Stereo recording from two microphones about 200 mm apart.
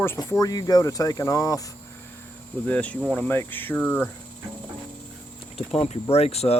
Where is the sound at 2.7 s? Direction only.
5° left (ahead or behind).